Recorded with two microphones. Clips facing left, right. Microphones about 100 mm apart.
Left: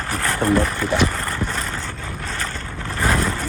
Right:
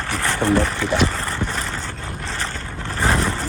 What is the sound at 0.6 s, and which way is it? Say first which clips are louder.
Speech: even; centre (ahead or behind).